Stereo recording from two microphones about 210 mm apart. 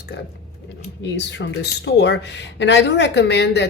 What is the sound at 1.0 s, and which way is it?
Speech, 60° left (ahead or behind).